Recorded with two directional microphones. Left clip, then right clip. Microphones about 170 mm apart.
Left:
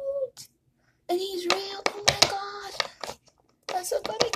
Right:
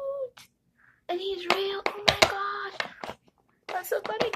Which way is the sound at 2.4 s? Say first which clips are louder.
Right 4 dB; 25° left (ahead or behind).